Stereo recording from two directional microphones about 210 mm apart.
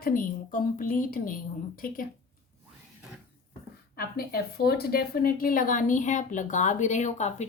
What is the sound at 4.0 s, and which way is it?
A woman's voice, 45° left (ahead or behind).